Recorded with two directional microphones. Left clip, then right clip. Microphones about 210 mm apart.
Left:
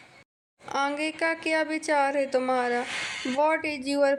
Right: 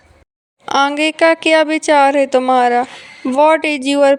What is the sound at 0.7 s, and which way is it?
Speech, 40° right (ahead or behind).